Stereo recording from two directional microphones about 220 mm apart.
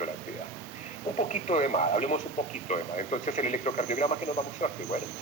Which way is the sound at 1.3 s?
30° left (ahead or behind).